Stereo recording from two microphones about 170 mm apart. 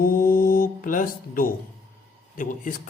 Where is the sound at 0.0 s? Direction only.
55° left (ahead or behind).